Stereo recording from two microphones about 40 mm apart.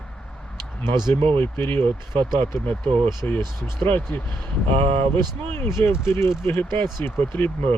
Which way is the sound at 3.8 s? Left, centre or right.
Left.